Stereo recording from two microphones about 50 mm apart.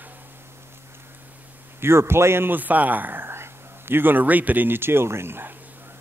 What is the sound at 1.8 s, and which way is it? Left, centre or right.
Speech, right.